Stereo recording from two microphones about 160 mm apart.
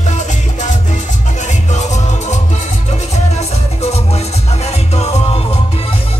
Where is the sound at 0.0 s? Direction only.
50° left (ahead or behind).